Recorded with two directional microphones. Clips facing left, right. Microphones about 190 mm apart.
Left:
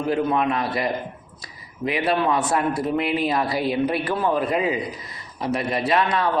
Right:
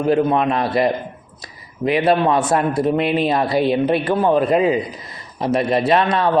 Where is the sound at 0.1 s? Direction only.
25° right (ahead or behind).